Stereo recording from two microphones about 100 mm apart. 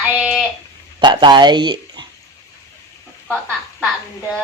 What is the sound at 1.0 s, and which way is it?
Speech, 50° right (ahead or behind).